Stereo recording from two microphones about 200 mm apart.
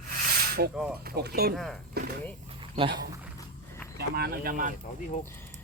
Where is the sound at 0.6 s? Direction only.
50° right (ahead or behind).